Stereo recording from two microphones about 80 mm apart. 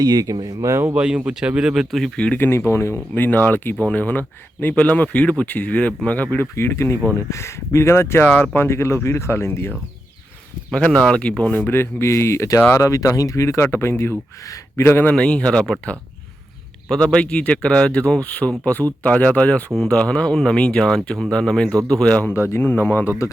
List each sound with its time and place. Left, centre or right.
0.0 s speech: right
0.7 s speech: right
0.9 s speech: centre
2.1 s speech: centre
2.4 s speech: left
10.7 s speech: centre; by 15.1 s left
15.1 s speech: centre
16.9 s speech: centre
22.4 s speech: left